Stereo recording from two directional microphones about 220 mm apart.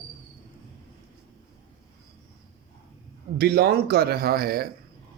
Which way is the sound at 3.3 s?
45° right (ahead or behind).